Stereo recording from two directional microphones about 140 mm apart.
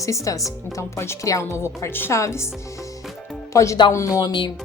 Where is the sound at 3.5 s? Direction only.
20° left (ahead or behind).